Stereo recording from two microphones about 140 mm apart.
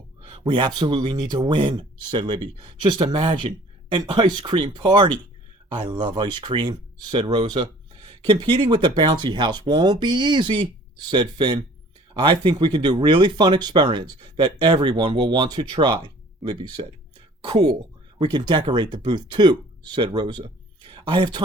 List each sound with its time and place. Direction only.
0.3 s speech: 40° right (ahead or behind)